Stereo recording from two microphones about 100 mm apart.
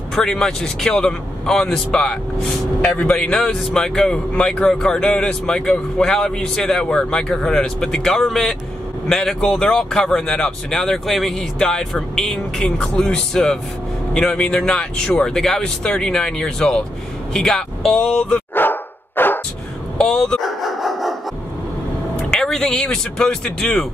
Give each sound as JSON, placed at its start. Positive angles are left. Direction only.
{"t": 0.1, "sound": "a man's voice", "side_deg": 5}
{"t": 18.5, "sound": "dog", "side_deg": 20}
{"t": 20.0, "sound": "dog", "side_deg": 5}
{"t": 22.3, "sound": "speech", "side_deg": 5}